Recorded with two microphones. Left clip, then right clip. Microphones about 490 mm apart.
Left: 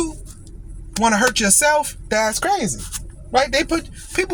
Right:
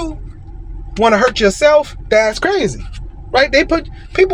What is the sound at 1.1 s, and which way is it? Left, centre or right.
Speech, left.